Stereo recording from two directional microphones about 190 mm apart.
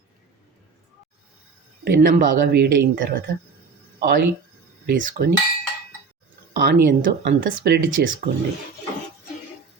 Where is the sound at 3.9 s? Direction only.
60° right (ahead or behind).